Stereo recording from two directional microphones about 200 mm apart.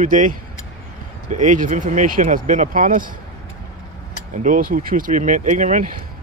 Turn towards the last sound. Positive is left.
turn(degrees=-40)  # may be behind; listen again after turning